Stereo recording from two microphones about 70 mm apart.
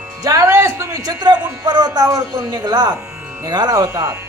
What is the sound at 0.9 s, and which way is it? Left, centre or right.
Speech, right.